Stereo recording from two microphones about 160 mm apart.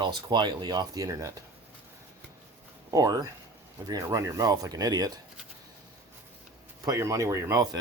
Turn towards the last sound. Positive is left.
turn(degrees=-25)  # may be behind; listen again after turning